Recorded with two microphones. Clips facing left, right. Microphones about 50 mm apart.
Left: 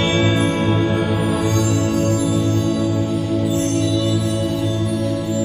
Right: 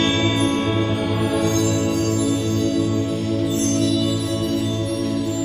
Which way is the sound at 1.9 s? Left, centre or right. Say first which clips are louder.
Left 2 dB; centre.